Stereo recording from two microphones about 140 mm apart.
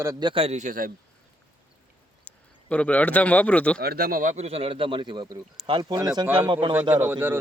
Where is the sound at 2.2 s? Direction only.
10° left (ahead or behind).